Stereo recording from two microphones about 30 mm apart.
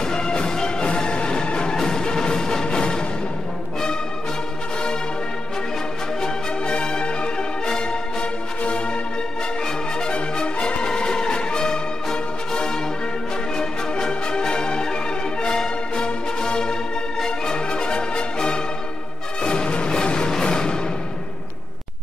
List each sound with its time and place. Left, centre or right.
0.0 s music: left
6.2 s music: left
8.6 s music: left
10.1 s music: left